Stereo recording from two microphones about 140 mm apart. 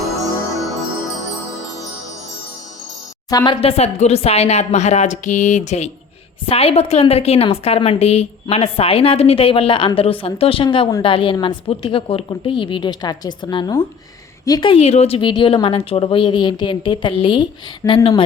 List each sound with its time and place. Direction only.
3.2 s speech: 25° left (ahead or behind)
3.6 s a woman's voice: 45° left (ahead or behind)
6.5 s a woman's voice: 45° left (ahead or behind); by 14.7 s 25° left (ahead or behind)
14.7 s a woman's voice: 50° left (ahead or behind)